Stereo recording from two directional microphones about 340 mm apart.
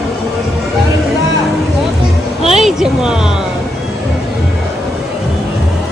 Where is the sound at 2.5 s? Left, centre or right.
Centre.